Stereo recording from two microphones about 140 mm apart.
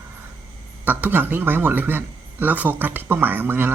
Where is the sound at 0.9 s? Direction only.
15° right (ahead or behind).